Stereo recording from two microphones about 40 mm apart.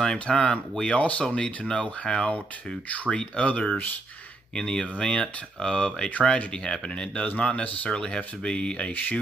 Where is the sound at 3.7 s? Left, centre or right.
Left.